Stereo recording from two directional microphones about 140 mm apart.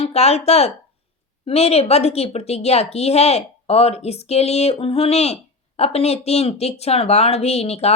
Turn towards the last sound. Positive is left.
turn(degrees=50)  # may be behind; listen again after turning